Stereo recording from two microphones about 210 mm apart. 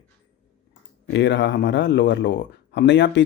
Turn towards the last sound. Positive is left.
turn(degrees=55)  # may be behind; listen again after turning